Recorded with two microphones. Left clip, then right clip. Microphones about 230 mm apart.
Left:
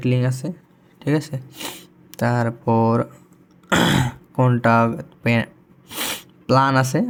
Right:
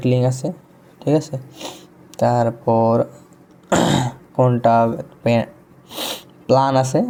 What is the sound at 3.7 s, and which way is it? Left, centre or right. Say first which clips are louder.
Throat clearing: right 1 dB; left.